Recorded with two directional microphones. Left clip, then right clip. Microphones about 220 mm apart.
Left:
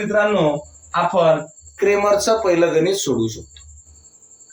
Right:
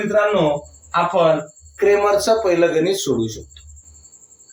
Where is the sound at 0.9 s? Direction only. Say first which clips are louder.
Even; 10° left (ahead or behind).